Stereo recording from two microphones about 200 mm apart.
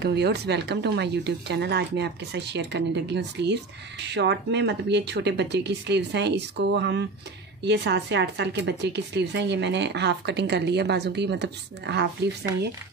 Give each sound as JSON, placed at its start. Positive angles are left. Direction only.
{"t": 0.0, "sound": "a woman's voice", "side_deg": -55}